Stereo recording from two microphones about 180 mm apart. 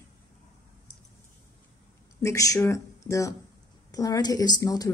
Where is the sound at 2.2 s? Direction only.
15° left (ahead or behind).